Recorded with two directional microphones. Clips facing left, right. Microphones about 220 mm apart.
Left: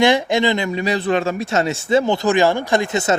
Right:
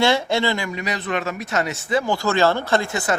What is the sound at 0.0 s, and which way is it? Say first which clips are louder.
Speech: left 4 dB; 15° left (ahead or behind).